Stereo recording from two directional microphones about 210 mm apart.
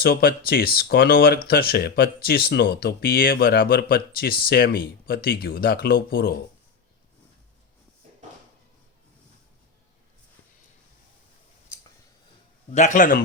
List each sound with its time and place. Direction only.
0.0 s speech: 45° left (ahead or behind)
12.7 s a man's voice: 35° left (ahead or behind)